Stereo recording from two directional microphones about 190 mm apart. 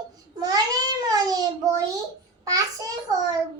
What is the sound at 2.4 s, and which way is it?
Child singing, 20° right (ahead or behind).